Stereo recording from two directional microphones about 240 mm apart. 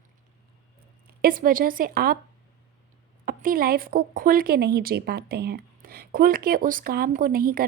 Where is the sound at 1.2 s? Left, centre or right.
Right.